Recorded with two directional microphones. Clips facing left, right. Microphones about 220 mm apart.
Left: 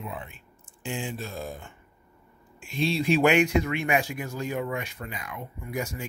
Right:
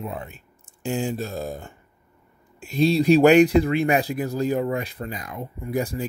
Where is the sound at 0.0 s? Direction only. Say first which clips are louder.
Right 5 dB; 40° right (ahead or behind).